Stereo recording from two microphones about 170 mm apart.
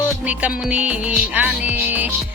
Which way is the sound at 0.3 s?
5° right (ahead or behind).